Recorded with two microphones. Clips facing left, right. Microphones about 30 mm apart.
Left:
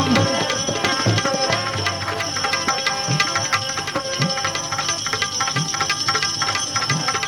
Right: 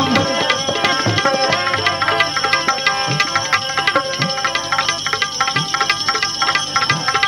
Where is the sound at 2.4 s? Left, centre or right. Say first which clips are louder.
Right 5 dB; right.